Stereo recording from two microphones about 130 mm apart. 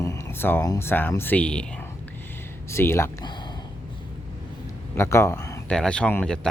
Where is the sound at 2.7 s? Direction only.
20° left (ahead or behind).